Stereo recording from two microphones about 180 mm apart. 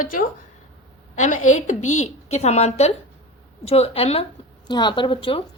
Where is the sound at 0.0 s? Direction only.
45° left (ahead or behind).